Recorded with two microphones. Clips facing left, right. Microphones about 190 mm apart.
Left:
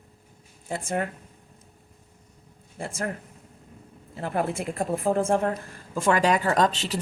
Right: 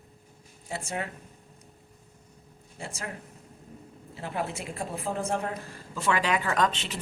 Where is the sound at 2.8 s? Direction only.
50° left (ahead or behind).